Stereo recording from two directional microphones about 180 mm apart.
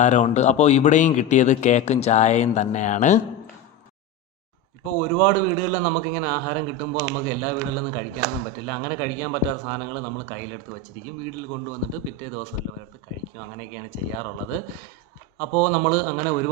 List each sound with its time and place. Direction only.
0.0 s speech: 40° left (ahead or behind)
4.9 s a man's voice: 55° left (ahead or behind)
12.0 s speech: 40° left (ahead or behind)
14.2 s a man's voice: 45° left (ahead or behind)